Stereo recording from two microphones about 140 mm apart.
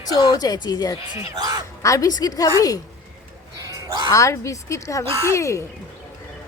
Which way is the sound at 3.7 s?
25° right (ahead or behind).